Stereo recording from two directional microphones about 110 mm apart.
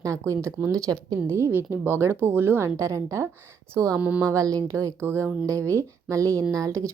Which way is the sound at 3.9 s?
15° right (ahead or behind).